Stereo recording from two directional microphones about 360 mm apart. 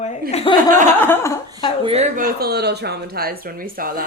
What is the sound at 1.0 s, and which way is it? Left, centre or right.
Speech, centre.